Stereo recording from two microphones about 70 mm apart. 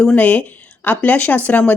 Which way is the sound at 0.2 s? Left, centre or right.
Left.